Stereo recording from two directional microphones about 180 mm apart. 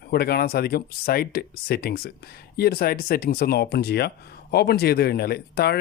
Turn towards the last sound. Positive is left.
turn(degrees=60)  # may be behind; listen again after turning